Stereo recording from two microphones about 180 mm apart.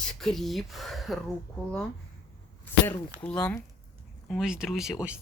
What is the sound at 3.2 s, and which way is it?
Speech, 5° left (ahead or behind).